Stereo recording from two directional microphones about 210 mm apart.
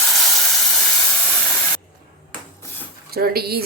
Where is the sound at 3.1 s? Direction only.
45° right (ahead or behind).